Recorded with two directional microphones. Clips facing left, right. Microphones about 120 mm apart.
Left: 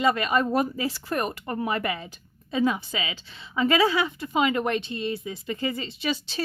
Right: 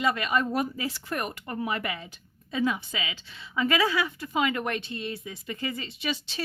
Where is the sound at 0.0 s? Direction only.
40° left (ahead or behind).